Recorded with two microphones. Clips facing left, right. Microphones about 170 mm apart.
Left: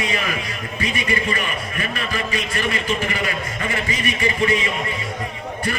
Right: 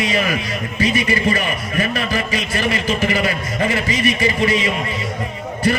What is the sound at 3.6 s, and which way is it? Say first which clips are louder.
Speech: right 7 dB; 35° right (ahead or behind).